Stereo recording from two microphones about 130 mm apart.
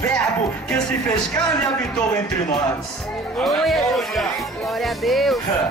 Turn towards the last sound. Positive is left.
turn(degrees=0)  # may be behind; listen again after turning